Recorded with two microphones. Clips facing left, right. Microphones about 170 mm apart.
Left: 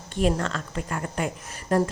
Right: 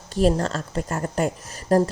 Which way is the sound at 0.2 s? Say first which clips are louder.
Right 4 dB; 35° right (ahead or behind).